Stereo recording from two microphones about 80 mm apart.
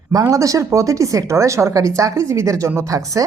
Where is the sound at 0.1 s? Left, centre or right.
Right.